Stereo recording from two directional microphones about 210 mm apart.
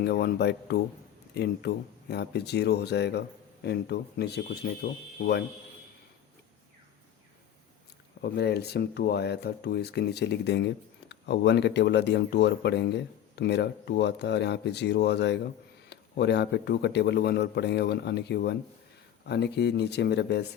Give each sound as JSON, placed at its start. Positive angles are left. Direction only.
{"t": 0.0, "sound": "speech", "side_deg": 50}
{"t": 8.2, "sound": "speech", "side_deg": 50}